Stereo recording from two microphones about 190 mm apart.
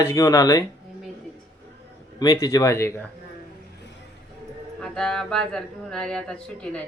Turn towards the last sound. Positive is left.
turn(degrees=5)  # may be behind; listen again after turning